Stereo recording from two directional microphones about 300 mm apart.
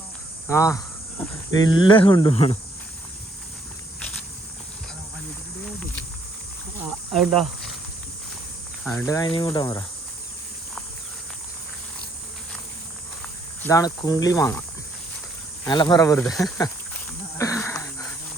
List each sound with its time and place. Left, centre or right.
0.4 s speech: centre
7.1 s speech: centre
8.8 s speech: centre
13.6 s speech: centre
15.6 s speech: centre
17.3 s wheeze: centre